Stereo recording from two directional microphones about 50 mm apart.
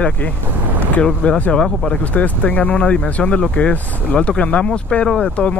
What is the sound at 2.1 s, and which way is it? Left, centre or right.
Speech, left.